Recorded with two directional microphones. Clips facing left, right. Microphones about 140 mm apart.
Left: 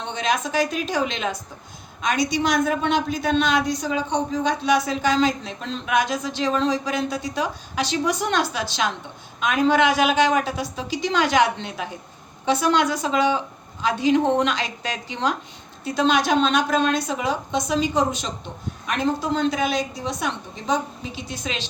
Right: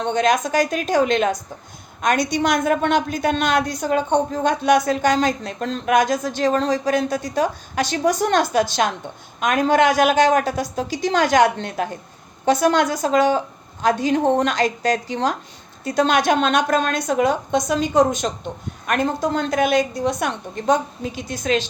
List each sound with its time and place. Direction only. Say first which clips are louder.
0.0 s a woman's voice: right 6 dB; 50° right (ahead or behind)